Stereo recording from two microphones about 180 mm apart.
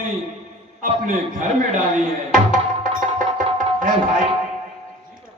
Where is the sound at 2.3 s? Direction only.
50° right (ahead or behind).